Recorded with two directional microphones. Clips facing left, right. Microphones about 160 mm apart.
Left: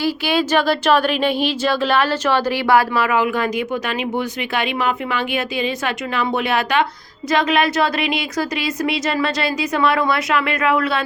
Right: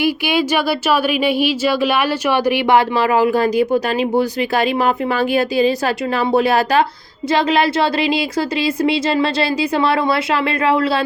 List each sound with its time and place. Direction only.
0.0 s a woman's voice: 10° right (ahead or behind); by 11.0 s 30° right (ahead or behind)